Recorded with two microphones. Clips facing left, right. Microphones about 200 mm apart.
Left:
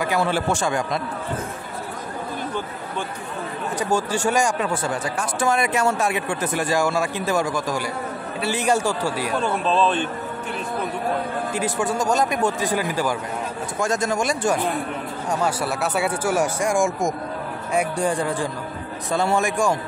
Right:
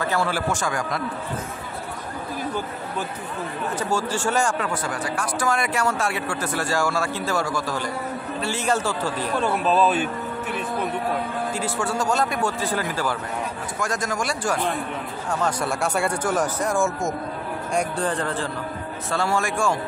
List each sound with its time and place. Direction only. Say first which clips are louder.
0.0 s speech: left 2 dB; 15° left (ahead or behind)
3.7 s speech: left 3 dB; 15° left (ahead or behind)
9.4 s speech: right 1 dB; 5° right (ahead or behind)
11.5 s speech: left 4 dB; 20° left (ahead or behind)
13.7 s speech: left 5 dB; 25° left (ahead or behind)
15.2 s speech: left 1 dB; 5° left (ahead or behind)